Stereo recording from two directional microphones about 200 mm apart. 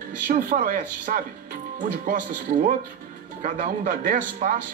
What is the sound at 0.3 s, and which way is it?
A man's voice, 40° right (ahead or behind).